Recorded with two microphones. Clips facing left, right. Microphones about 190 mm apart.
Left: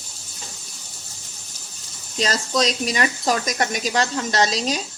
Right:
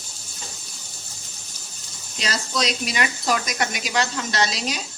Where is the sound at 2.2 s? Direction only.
40° left (ahead or behind).